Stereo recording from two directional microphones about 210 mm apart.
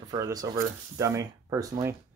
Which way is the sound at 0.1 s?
15° right (ahead or behind).